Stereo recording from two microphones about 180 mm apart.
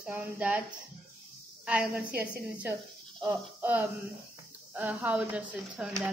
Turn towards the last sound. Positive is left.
turn(degrees=-5)  # may be behind; listen again after turning